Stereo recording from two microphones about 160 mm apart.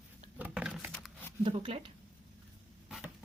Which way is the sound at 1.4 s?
35° right (ahead or behind).